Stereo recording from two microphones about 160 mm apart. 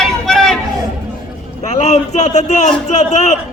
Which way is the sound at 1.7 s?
45° left (ahead or behind).